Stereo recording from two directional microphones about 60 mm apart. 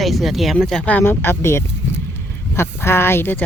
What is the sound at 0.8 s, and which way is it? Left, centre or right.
Speech, left.